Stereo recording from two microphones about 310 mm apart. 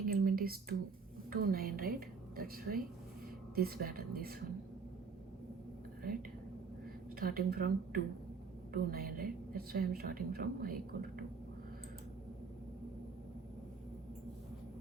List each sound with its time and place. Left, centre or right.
0.1 s a woman's voice: right
7.2 s a woman's voice: right